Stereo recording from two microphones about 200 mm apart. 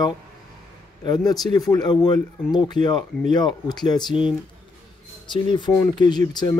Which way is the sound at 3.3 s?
20° left (ahead or behind).